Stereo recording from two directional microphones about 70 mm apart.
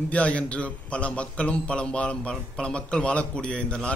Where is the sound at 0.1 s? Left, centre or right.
Centre.